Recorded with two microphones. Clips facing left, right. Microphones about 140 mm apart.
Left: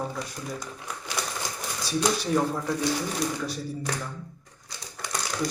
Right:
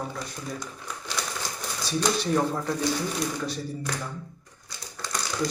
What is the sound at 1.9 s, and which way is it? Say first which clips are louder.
Speech: even; 5° left (ahead or behind).